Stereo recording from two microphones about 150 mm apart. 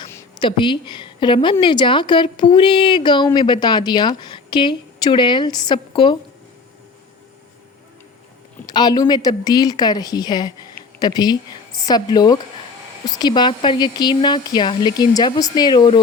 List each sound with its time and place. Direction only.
0.3 s a woman's voice: 30° left (ahead or behind)
8.6 s speech: 30° left (ahead or behind)